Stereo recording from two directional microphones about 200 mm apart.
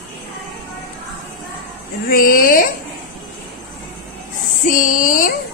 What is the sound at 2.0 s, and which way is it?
Speech, 45° left (ahead or behind).